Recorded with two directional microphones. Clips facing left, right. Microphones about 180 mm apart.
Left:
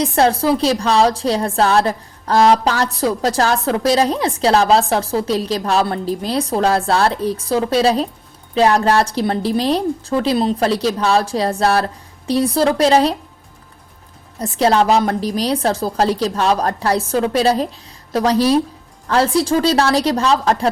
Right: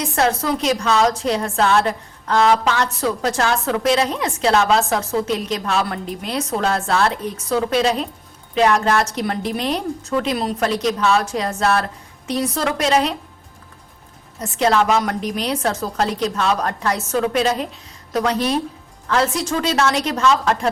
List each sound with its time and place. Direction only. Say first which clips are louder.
0.0 s a woman's voice: left 5 dB; 30° left (ahead or behind)
14.3 s a woman's voice: left 3 dB; 35° left (ahead or behind)